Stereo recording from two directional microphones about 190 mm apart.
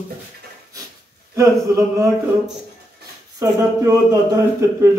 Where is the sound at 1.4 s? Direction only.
15° right (ahead or behind).